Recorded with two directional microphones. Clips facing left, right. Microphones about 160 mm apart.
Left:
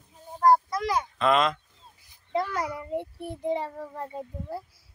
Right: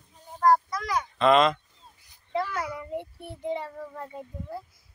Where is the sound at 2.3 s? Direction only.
35° left (ahead or behind).